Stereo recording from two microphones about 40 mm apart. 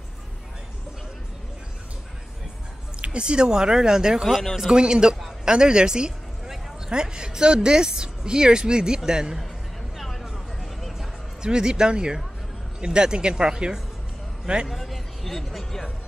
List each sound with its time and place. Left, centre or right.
3.0 s speech: right
9.9 s a sound: centre
10.2 s a sound: centre
10.8 s music: centre
11.4 s speech: centre
14.7 s speech: centre